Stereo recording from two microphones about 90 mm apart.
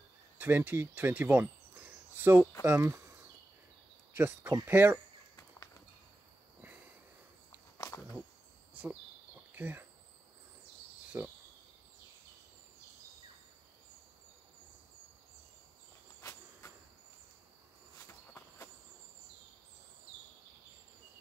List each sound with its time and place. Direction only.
0.4 s speech: 20° right (ahead or behind)
7.7 s a sound: 35° left (ahead or behind)
9.6 s speech: 20° right (ahead or behind)
11.1 s cricket: 15° right (ahead or behind)
16.2 s cricket: 30° left (ahead or behind)
18.0 s a sound: 30° left (ahead or behind)